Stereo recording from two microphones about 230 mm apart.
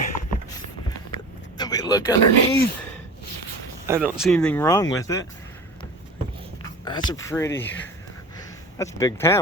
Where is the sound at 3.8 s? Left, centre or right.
Centre.